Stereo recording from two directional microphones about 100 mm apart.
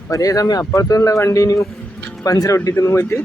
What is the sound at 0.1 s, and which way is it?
A man's voice, 35° left (ahead or behind).